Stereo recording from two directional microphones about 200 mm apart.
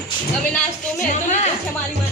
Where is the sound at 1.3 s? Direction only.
35° left (ahead or behind).